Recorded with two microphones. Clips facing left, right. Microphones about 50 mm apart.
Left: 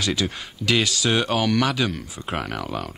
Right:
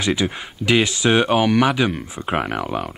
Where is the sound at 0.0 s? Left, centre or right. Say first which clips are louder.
Right 4 dB; right.